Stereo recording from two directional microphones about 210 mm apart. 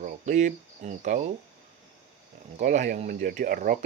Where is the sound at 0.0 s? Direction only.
35° right (ahead or behind).